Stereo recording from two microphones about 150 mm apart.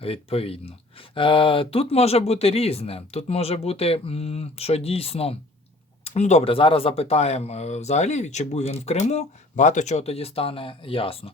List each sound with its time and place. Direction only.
0.0 s speech: 40° left (ahead or behind)